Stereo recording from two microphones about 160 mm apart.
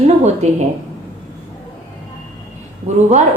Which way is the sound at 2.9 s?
45° right (ahead or behind).